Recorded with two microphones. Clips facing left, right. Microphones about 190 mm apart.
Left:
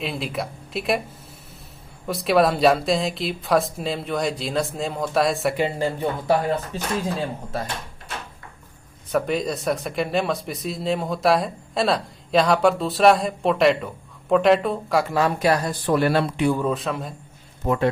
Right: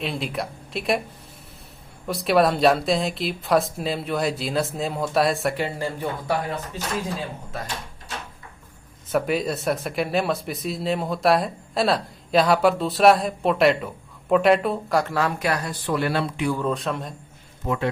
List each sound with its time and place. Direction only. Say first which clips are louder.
0.0 s speech: even; centre (ahead or behind)
2.0 s speech: left 1 dB; centre (ahead or behind)
5.5 s speech: left 4 dB; 20° left (ahead or behind)
9.1 s speech: even; 5° right (ahead or behind)
15.0 s speech: left 3 dB; 15° left (ahead or behind)
15.4 s speech: left 5 dB; 30° left (ahead or behind)
15.9 s speech: left 4 dB; 45° left (ahead or behind)
16.6 s speech: left 1 dB; centre (ahead or behind)
17.6 s a man's voice: left 3 dB; 50° left (ahead or behind)